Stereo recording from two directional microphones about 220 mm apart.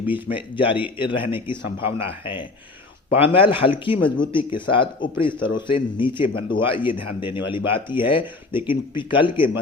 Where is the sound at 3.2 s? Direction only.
25° left (ahead or behind).